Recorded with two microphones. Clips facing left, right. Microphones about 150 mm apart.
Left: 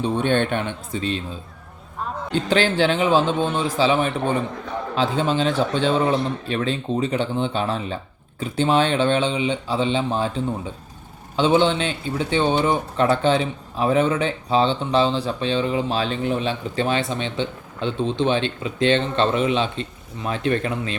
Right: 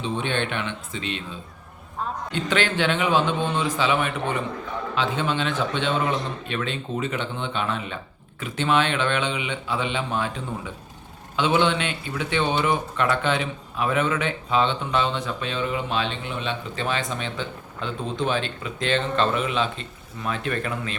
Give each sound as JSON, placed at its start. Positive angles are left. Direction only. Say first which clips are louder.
{"t": 0.0, "sound": "speech", "louder": "left 6 dB", "side_deg": 45}
{"t": 2.3, "sound": "speech", "louder": "left 5 dB", "side_deg": 35}